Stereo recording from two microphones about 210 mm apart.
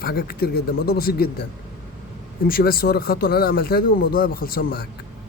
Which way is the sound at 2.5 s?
45° left (ahead or behind).